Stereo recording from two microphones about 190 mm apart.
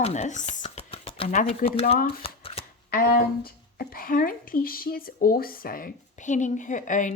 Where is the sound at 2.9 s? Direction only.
50° left (ahead or behind).